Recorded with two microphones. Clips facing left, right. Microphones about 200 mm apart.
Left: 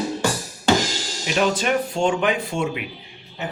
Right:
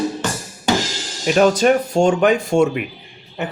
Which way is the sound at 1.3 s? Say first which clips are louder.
Right 6 dB; 45° right (ahead or behind).